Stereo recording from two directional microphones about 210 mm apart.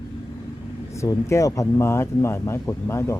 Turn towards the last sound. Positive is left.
turn(degrees=10)  # may be behind; listen again after turning